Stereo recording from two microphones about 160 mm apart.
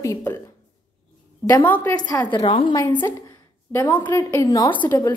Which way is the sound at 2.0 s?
25° left (ahead or behind).